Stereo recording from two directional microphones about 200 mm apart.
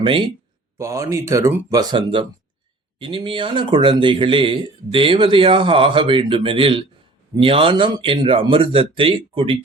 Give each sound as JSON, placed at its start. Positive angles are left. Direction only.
{"t": 0.0, "sound": "speech", "side_deg": -25}
{"t": 0.8, "sound": "speech", "side_deg": -15}